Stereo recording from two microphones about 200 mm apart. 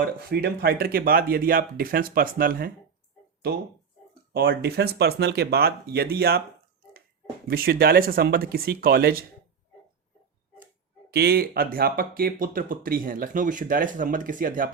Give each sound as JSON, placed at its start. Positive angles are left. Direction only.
{"t": 0.0, "sound": "speech", "side_deg": -50}
{"t": 4.4, "sound": "speech", "side_deg": -55}
{"t": 7.4, "sound": "speech", "side_deg": -50}
{"t": 11.1, "sound": "speech", "side_deg": -50}